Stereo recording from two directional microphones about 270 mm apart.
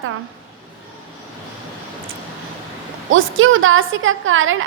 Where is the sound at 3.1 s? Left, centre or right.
Right.